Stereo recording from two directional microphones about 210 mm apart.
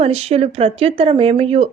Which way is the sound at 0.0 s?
30° right (ahead or behind).